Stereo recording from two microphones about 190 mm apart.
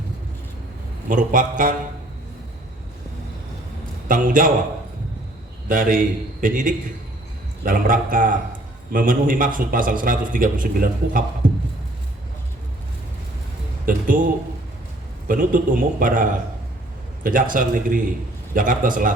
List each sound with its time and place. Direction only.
1.1 s a man's voice: 45° right (ahead or behind)
4.1 s a man's voice: 45° right (ahead or behind)
5.6 s a man's voice: 45° right (ahead or behind)
11.4 s a sound: 45° right (ahead or behind)
13.8 s speech: 45° right (ahead or behind)
15.3 s a man's voice: 45° right (ahead or behind)